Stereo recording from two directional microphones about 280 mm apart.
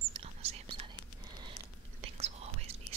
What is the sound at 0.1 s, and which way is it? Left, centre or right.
Whispering, right.